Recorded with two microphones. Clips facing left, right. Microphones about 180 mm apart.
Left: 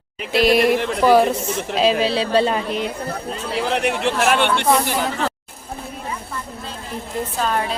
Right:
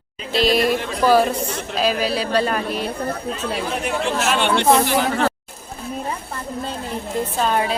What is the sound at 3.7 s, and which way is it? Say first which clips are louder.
Speech: left 5 dB; 75° left (ahead or behind).